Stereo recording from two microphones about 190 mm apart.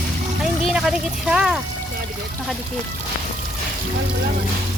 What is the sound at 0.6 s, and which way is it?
Speech, centre (ahead or behind).